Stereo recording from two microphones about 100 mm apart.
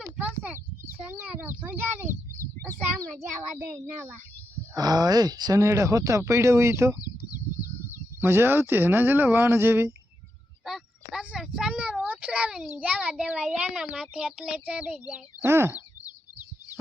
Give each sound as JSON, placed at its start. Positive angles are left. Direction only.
{"t": 0.2, "sound": "a sound", "side_deg": -15}
{"t": 3.6, "sound": "speech", "side_deg": -15}
{"t": 4.8, "sound": "speech", "side_deg": -40}
{"t": 7.6, "sound": "a sound", "side_deg": 35}
{"t": 8.2, "sound": "speech", "side_deg": -20}
{"t": 10.7, "sound": "a child's voice", "side_deg": -5}
{"t": 15.4, "sound": "speech", "side_deg": -25}